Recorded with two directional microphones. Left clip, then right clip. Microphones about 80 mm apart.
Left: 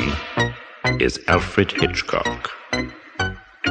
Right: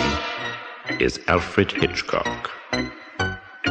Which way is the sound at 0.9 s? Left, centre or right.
Left.